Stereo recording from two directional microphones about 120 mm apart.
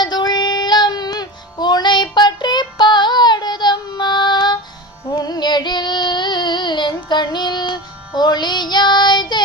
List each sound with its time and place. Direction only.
0.0 s music: 35° left (ahead or behind)
5.1 s child singing: 35° left (ahead or behind)